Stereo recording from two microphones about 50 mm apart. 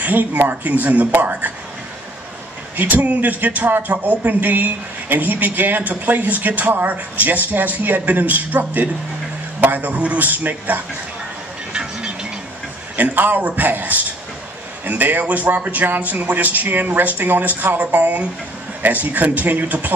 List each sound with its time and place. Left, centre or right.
0.0 s speech: right
2.8 s speech: right
11.7 s music: centre
12.9 s speech: right